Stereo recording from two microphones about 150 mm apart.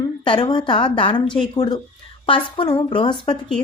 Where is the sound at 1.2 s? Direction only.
5° left (ahead or behind).